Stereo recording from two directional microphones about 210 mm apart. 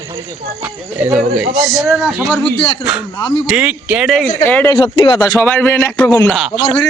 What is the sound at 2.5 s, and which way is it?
Speech, 25° left (ahead or behind).